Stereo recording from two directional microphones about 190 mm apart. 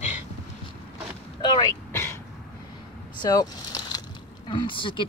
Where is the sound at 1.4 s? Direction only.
20° left (ahead or behind).